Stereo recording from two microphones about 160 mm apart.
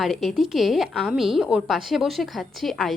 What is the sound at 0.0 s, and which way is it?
A woman's voice, centre (ahead or behind).